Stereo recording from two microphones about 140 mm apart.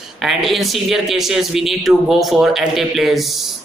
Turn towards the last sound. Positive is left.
turn(degrees=0)  # may be behind; listen again after turning